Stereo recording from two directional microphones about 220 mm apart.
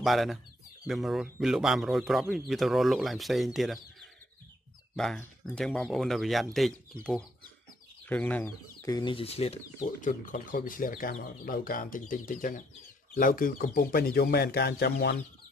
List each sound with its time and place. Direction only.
0.0 s speech: centre (ahead or behind); by 15.1 s 50° left (ahead or behind)